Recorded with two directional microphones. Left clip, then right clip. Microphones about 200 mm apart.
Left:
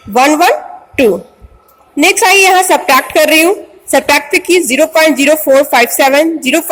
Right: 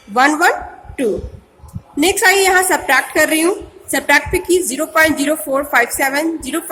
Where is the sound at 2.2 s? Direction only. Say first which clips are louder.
Left 4 dB; 30° left (ahead or behind).